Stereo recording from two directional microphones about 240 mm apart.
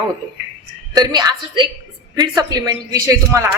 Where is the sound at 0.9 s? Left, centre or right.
Centre.